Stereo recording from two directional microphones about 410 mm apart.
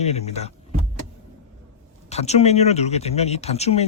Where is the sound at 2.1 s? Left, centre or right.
Centre.